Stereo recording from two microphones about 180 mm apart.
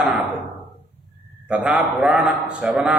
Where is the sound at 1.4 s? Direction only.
5° right (ahead or behind).